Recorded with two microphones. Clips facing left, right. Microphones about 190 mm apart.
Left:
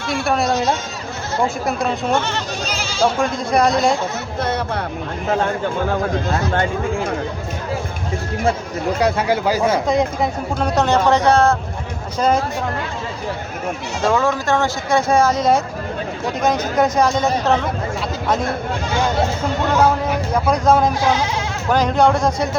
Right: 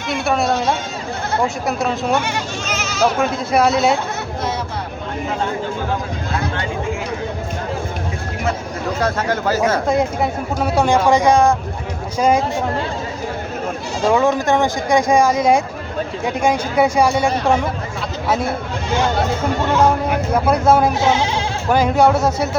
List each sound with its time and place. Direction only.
0.3 s speech: centre (ahead or behind)
2.1 s speech: 10° right (ahead or behind)
2.6 s goat: 30° left (ahead or behind)
3.2 s speech: 5° right (ahead or behind)
4.4 s a sound: 60° left (ahead or behind)
9.0 s speech: 10° left (ahead or behind)
9.8 s speech: 5° right (ahead or behind)
14.0 s speech: 15° right (ahead or behind)
20.3 s speech: 5° right (ahead or behind)
21.0 s speech: 25° right (ahead or behind)
21.7 s speech: 10° right (ahead or behind)